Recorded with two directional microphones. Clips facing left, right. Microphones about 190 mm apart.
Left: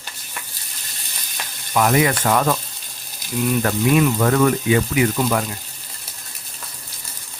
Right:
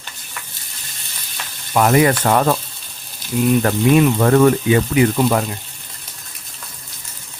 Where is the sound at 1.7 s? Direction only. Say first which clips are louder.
Right 3 dB; 45° right (ahead or behind).